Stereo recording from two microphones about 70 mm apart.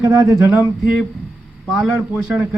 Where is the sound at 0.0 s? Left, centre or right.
Right.